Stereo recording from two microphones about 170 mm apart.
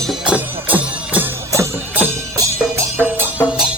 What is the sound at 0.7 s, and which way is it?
Music, 10° right (ahead or behind).